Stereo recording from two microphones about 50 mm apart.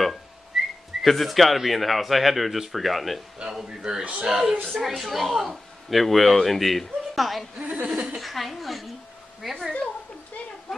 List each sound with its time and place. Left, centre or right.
0.5 s whistling: centre
1.0 s speech: centre
3.6 s a man's voice: centre
7.5 s chuckle: right
8.2 s a sound: centre
9.4 s speech: centre
10.7 s a sound: centre